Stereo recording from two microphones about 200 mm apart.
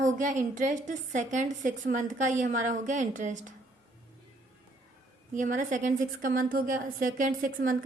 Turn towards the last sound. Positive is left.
turn(degrees=-45)  # may be behind; listen again after turning